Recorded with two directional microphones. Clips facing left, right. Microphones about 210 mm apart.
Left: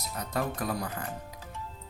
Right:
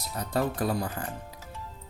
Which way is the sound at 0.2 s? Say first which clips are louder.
Right 4 dB; 30° right (ahead or behind).